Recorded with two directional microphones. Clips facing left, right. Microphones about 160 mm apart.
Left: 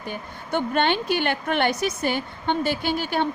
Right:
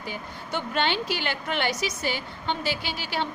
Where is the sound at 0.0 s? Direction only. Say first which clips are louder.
Left 2 dB; 55° left (ahead or behind).